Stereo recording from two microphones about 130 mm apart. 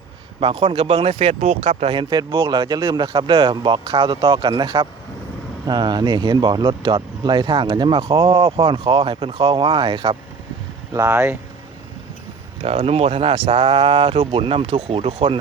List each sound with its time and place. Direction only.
0.6 s speech: 50° right (ahead or behind)
2.0 s speech: 35° right (ahead or behind)
10.9 s speech: 25° right (ahead or behind)
12.6 s speech: 50° right (ahead or behind)